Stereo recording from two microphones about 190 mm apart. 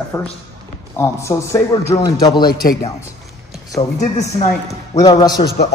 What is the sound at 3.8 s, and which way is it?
Speech, 35° left (ahead or behind).